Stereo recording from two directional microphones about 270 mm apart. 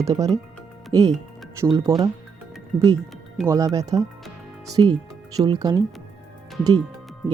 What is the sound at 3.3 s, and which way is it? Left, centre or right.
Speech, centre.